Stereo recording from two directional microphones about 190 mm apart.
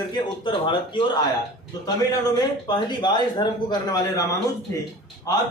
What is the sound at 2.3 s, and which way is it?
A man's voice, 25° left (ahead or behind).